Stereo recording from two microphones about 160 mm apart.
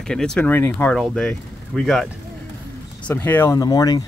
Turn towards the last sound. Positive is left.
turn(degrees=25)  # may be behind; listen again after turning